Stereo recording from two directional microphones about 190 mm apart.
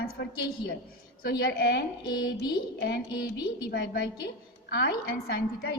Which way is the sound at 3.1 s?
20° left (ahead or behind).